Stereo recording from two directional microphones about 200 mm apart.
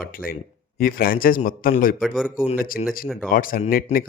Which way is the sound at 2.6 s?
45° left (ahead or behind).